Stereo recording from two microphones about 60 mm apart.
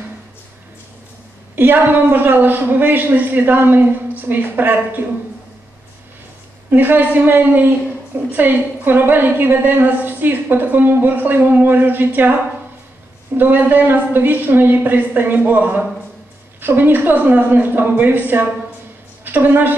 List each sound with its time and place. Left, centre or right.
1.5 s a woman's voice: right
6.7 s a woman's voice: right
13.4 s a woman's voice: right